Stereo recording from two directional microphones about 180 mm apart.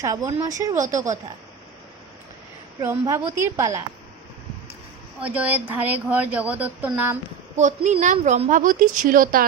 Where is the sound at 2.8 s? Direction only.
15° right (ahead or behind).